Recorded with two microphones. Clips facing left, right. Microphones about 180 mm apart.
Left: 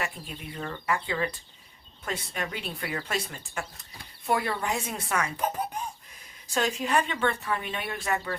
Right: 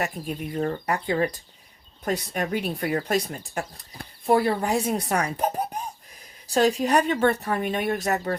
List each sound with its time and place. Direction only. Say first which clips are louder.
0.0 s speech: right 7 dB; 45° right (ahead or behind)